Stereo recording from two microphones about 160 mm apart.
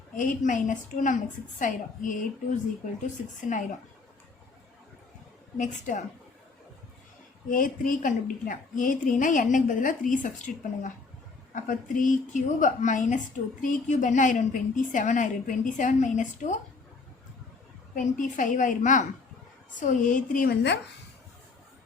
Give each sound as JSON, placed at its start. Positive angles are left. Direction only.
{"t": 0.2, "sound": "a woman's voice", "side_deg": 55}
{"t": 5.5, "sound": "a woman's voice", "side_deg": 50}
{"t": 7.4, "sound": "a woman's voice", "side_deg": 55}
{"t": 17.9, "sound": "a woman's voice", "side_deg": 55}